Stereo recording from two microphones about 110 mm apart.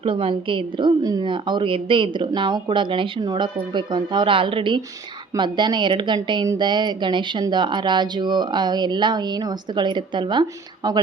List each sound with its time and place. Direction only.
0.0 s a woman's voice: 55° right (ahead or behind); by 11.0 s 40° right (ahead or behind)